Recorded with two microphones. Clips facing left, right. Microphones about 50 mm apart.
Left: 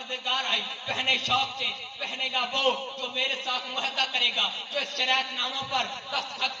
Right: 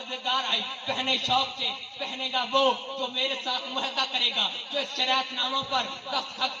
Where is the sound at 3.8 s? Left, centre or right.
Left.